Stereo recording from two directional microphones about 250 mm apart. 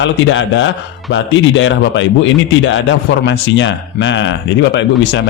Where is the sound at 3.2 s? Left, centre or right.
Left.